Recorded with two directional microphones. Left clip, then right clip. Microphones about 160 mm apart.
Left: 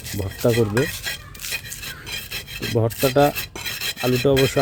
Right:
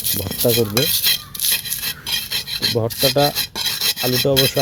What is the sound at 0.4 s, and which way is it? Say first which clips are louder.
Speech: right 2 dB; 15° left (ahead or behind).